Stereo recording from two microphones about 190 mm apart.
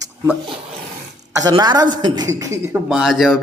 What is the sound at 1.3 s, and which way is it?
A woman's voice, 20° right (ahead or behind).